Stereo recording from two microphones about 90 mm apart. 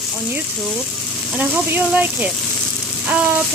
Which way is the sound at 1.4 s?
15° right (ahead or behind).